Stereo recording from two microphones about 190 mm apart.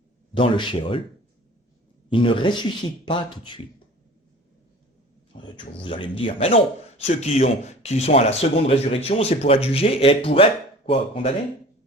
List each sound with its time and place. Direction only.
0.3 s speech: 25° left (ahead or behind)
2.0 s speech: 25° left (ahead or behind)
5.4 s speech: 25° left (ahead or behind)